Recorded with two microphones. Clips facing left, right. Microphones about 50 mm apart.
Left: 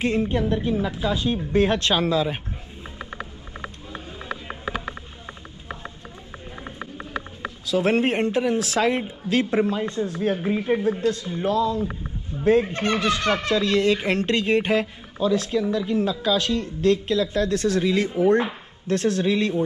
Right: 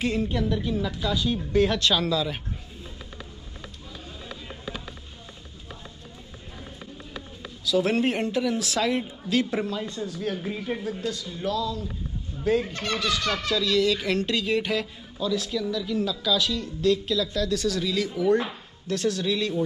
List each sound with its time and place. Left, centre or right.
0.0 s a woman's voice: left
3.2 s a sound: left
4.2 s music: left
6.6 s speech: left